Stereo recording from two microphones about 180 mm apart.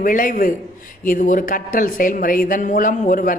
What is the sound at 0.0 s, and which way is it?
A man's voice, 50° left (ahead or behind).